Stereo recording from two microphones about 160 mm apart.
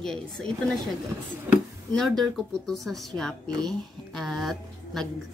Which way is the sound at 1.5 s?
10° right (ahead or behind).